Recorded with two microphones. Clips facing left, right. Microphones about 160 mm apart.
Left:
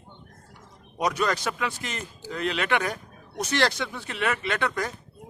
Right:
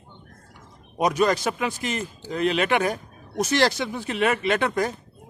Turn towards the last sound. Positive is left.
turn(degrees=-25)  # may be behind; listen again after turning